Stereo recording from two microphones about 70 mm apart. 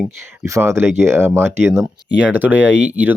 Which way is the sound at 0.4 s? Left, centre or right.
Right.